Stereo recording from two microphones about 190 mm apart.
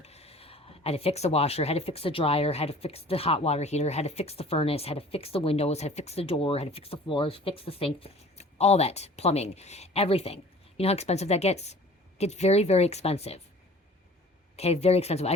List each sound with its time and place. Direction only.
0.0 s speech: 35° left (ahead or behind)
14.5 s speech: 35° left (ahead or behind)